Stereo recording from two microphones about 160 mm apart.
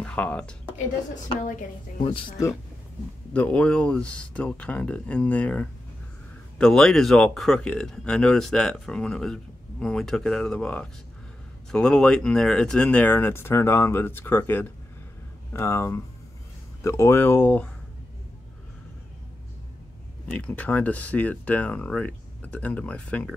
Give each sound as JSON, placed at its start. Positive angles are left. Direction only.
{"t": 0.0, "sound": "speech", "side_deg": 10}
{"t": 0.7, "sound": "a woman's voice", "side_deg": 50}
{"t": 2.0, "sound": "speech", "side_deg": 30}
{"t": 3.3, "sound": "speech", "side_deg": 10}
{"t": 20.2, "sound": "speech", "side_deg": 10}